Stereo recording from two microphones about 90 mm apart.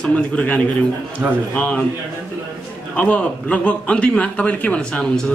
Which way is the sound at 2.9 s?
15° left (ahead or behind).